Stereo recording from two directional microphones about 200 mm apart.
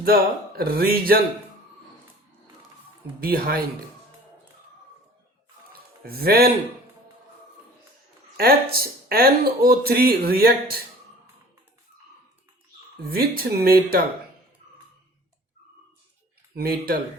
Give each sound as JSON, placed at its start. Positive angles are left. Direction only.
{"t": 0.0, "sound": "speech", "side_deg": -50}
{"t": 3.2, "sound": "speech", "side_deg": -50}
{"t": 6.1, "sound": "speech", "side_deg": -50}
{"t": 8.4, "sound": "speech", "side_deg": -50}
{"t": 13.0, "sound": "speech", "side_deg": -50}
{"t": 16.6, "sound": "speech", "side_deg": -50}